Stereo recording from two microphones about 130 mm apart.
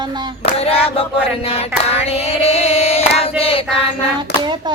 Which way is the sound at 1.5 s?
50° left (ahead or behind).